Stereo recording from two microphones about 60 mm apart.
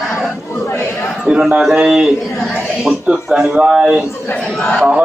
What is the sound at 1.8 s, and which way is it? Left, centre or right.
Speech, centre.